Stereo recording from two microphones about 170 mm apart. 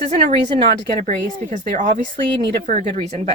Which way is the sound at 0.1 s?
40° right (ahead or behind).